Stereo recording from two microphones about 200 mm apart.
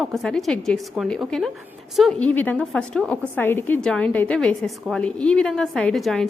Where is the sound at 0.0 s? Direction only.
Centre (ahead or behind).